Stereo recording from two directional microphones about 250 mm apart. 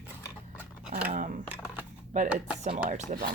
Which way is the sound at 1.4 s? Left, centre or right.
Centre.